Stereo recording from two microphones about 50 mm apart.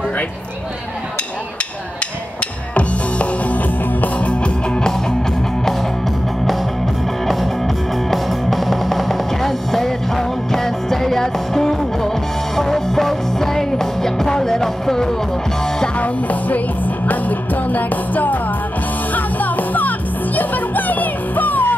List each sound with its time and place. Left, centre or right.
2.7 s music: left
7.2 s music: centre
16.0 s music: left